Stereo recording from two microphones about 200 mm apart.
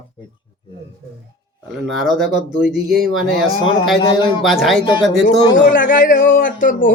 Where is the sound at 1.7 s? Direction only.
Centre (ahead or behind).